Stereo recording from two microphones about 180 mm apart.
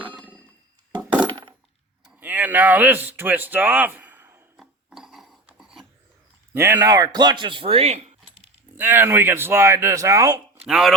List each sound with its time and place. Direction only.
2.0 s speech: 10° right (ahead or behind)
4.5 s a sound: centre (ahead or behind)
6.5 s speech: 15° right (ahead or behind); by 8.4 s 35° right (ahead or behind)
8.7 s speech: 10° right (ahead or behind)
10.6 s speech: 5° right (ahead or behind)